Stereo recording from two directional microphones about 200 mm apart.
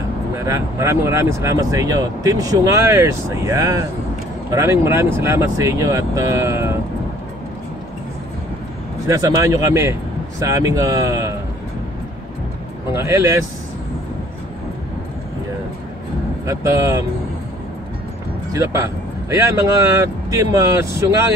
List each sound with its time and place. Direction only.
0.4 s speech: 15° right (ahead or behind)
9.0 s speech: 15° right (ahead or behind)
12.9 s speech: 15° right (ahead or behind)
16.4 s speech: 15° right (ahead or behind)
18.5 s speech: 15° right (ahead or behind)